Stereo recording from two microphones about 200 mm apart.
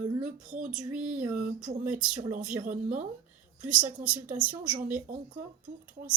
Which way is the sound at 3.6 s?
5° right (ahead or behind).